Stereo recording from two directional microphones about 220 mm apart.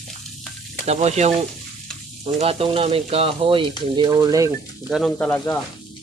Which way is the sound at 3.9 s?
20° right (ahead or behind).